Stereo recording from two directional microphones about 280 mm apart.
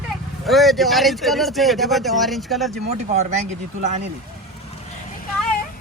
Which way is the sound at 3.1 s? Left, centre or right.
Right.